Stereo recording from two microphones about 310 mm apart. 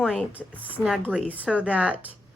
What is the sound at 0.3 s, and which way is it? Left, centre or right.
Speech, centre.